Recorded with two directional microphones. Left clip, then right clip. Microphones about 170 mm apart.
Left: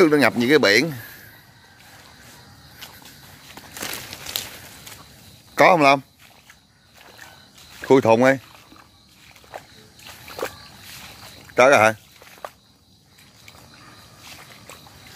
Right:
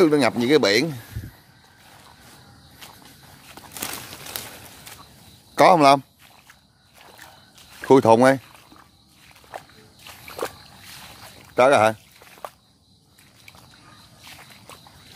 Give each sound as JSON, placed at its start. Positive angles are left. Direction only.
{"t": 0.0, "sound": "speech", "side_deg": -5}
{"t": 2.8, "sound": "walk", "side_deg": -20}
{"t": 3.7, "sound": "a sound", "side_deg": -55}
{"t": 5.5, "sound": "a man's voice", "side_deg": -20}
{"t": 7.8, "sound": "speech", "side_deg": -25}
{"t": 9.5, "sound": "a sound", "side_deg": -20}
{"t": 11.0, "sound": "boat", "side_deg": -10}
{"t": 12.2, "sound": "walk", "side_deg": -20}